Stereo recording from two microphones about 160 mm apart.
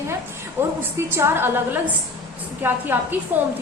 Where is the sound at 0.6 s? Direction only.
15° right (ahead or behind).